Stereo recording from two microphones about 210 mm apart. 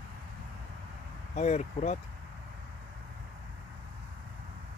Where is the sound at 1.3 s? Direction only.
35° left (ahead or behind).